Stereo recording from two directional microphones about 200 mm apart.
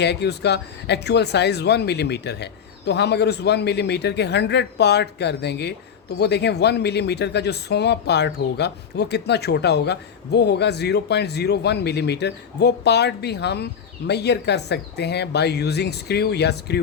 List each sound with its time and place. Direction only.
0.0 s speech: 55° left (ahead or behind)